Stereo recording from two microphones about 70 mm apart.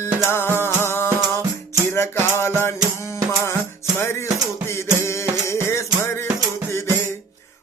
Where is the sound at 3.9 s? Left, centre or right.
Left.